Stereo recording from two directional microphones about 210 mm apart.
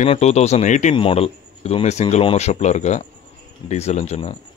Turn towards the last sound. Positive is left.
turn(degrees=25)  # may be behind; listen again after turning